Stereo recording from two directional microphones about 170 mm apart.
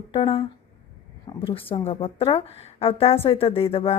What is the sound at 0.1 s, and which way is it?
A woman's voice, 30° left (ahead or behind).